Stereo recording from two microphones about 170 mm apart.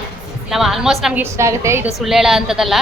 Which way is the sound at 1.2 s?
15° right (ahead or behind).